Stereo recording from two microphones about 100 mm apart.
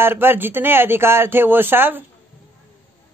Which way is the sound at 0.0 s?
20° right (ahead or behind).